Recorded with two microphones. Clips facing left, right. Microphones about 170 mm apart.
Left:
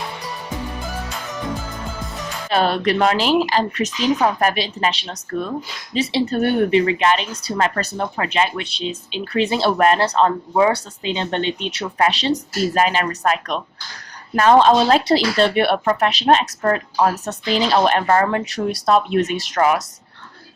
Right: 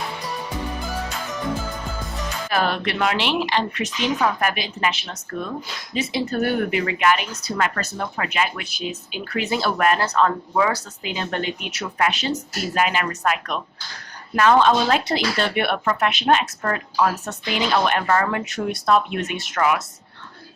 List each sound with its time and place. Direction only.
2.5 s a woman's voice: 30° left (ahead or behind)